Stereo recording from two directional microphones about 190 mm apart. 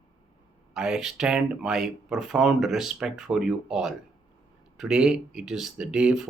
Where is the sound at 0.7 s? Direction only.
5° right (ahead or behind).